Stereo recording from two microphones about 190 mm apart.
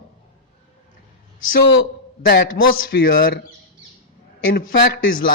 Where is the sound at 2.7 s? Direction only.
55° left (ahead or behind).